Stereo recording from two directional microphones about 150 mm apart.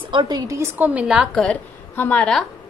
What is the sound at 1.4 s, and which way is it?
A woman's voice, 10° left (ahead or behind).